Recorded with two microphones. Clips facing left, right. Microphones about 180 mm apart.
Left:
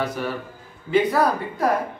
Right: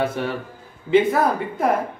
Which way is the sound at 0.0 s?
25° right (ahead or behind).